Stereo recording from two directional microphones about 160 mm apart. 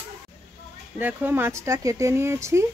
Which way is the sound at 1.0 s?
10° right (ahead or behind).